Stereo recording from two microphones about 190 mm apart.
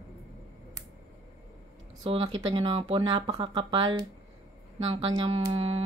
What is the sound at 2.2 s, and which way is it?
Speech, 25° right (ahead or behind).